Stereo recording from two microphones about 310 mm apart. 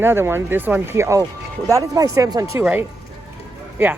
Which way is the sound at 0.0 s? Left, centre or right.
Centre.